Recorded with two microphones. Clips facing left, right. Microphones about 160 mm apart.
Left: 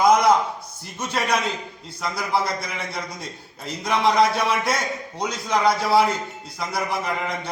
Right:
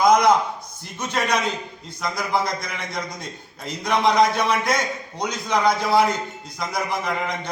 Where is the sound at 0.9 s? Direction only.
5° left (ahead or behind).